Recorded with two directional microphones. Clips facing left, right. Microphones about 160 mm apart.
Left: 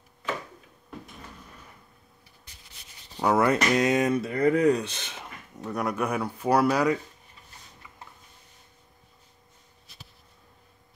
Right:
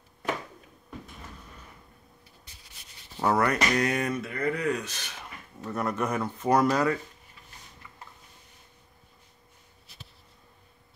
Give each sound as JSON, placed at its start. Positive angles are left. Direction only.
{"t": 3.3, "sound": "speech", "side_deg": 20}
{"t": 4.2, "sound": "speech", "side_deg": 35}
{"t": 5.7, "sound": "speech", "side_deg": 10}